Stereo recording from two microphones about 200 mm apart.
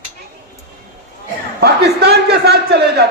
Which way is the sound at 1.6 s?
55° right (ahead or behind).